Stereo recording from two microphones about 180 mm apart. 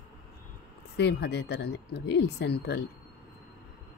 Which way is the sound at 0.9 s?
70° left (ahead or behind).